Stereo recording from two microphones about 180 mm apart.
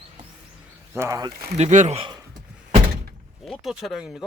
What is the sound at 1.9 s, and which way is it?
Speech, 25° right (ahead or behind).